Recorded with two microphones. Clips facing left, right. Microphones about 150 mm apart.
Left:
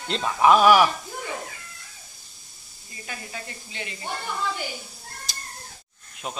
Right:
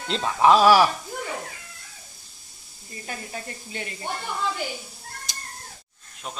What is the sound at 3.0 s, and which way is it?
Speech, 40° right (ahead or behind).